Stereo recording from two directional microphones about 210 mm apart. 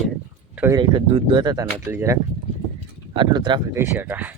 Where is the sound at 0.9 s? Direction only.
25° right (ahead or behind).